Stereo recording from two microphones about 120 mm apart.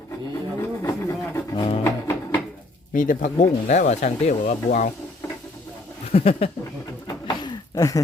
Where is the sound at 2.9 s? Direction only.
90° left.